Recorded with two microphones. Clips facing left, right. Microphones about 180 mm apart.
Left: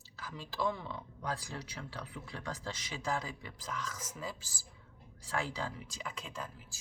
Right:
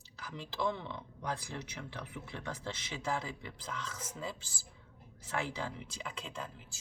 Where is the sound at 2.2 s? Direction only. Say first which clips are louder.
Even; 25° right (ahead or behind).